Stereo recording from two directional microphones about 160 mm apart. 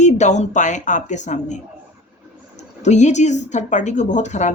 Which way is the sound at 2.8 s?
45° left (ahead or behind).